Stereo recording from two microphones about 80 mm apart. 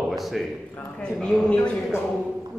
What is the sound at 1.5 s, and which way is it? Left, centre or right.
Speech, centre.